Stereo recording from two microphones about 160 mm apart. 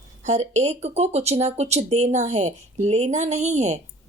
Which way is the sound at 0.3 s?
45° right (ahead or behind).